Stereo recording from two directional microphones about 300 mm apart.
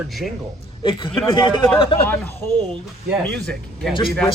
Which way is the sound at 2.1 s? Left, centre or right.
Centre.